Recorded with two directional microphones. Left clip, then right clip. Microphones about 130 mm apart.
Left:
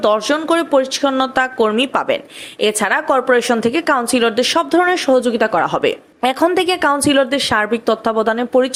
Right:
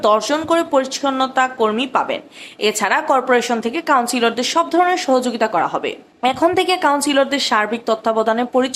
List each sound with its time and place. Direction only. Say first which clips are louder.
0.0 s speech: even; 25° left (ahead or behind); by 2.1 s 45° left (ahead or behind)
2.6 s speech: left 1 dB; 30° left (ahead or behind)
6.4 s speech: left 1 dB; 30° left (ahead or behind)